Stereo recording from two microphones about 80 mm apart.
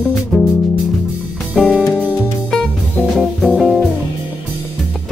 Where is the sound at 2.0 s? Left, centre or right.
Centre.